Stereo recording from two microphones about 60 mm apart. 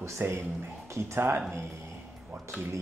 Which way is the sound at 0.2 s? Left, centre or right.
Right.